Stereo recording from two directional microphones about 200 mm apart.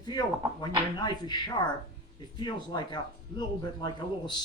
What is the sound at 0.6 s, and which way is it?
Speech, 20° left (ahead or behind).